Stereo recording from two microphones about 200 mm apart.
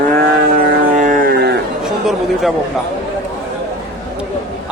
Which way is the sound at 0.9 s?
40° right (ahead or behind).